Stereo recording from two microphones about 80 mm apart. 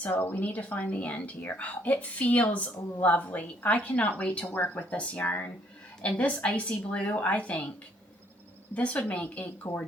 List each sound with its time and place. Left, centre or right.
0.0 s a woman's voice: left
8.7 s a woman's voice: centre